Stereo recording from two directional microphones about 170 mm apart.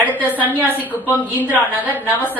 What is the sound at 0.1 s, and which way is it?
Speech, 10° left (ahead or behind).